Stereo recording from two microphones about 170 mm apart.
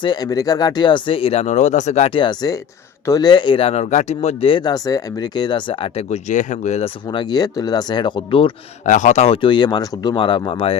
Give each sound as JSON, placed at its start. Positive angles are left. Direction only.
{"t": 0.0, "sound": "speech", "side_deg": 25}
{"t": 6.1, "sound": "speech", "side_deg": 45}
{"t": 8.9, "sound": "speech", "side_deg": 45}